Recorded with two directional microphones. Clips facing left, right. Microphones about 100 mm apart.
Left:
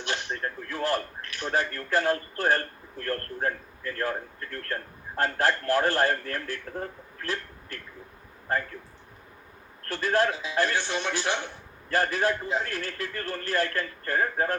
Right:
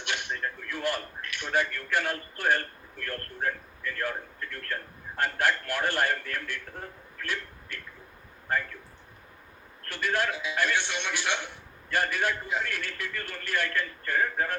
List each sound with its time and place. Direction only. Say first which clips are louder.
0.0 s a man's voice: left 2 dB; 35° left (ahead or behind)
9.9 s a man's voice: left 4 dB; 35° left (ahead or behind)